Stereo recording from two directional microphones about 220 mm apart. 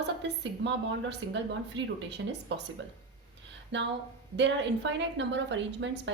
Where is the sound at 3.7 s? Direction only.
55° right (ahead or behind).